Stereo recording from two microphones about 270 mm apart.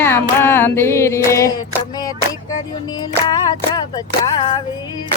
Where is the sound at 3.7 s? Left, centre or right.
Centre.